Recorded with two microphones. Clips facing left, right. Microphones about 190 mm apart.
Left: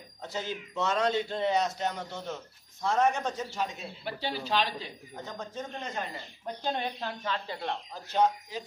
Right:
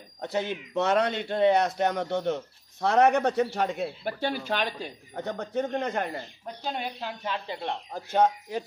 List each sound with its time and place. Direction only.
0.2 s speech: 60° right (ahead or behind)
5.1 s speech: 65° right (ahead or behind)
6.4 s speech: 5° right (ahead or behind)
7.9 s speech: 50° right (ahead or behind)